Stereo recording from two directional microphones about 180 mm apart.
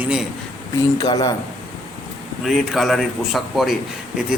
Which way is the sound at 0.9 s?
20° left (ahead or behind).